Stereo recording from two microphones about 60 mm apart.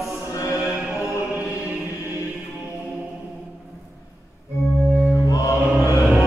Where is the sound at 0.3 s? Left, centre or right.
Left.